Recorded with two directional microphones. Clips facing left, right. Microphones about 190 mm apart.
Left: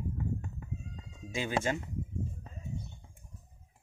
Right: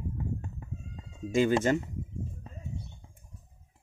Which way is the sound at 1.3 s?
45° right (ahead or behind).